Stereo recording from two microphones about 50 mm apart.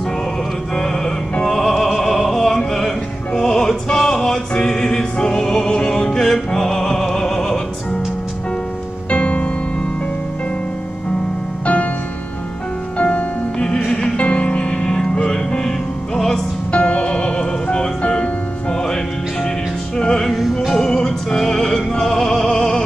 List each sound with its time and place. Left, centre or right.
1.4 s opera: centre
3.3 s music: centre
9.1 s music: left
11.6 s music: left
12.9 s music: left
16.7 s music: left
20.0 s music: centre
20.2 s music: centre